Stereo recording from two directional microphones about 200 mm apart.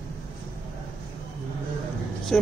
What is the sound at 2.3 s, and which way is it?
Speech, 5° left (ahead or behind).